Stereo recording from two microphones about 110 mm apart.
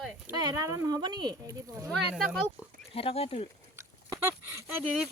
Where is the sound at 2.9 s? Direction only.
60° left (ahead or behind).